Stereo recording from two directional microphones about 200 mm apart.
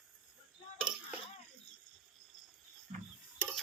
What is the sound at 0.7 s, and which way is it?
Cutlery, 5° right (ahead or behind).